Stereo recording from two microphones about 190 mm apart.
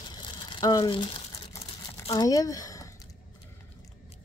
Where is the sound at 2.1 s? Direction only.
20° left (ahead or behind).